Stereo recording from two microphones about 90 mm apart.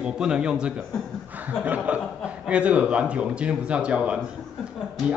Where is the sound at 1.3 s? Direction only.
15° right (ahead or behind).